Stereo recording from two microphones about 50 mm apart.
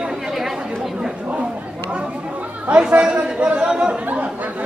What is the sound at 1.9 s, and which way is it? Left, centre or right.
Chatter, right.